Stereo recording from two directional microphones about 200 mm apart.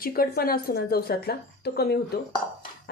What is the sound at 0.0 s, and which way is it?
A woman's voice, 50° left (ahead or behind).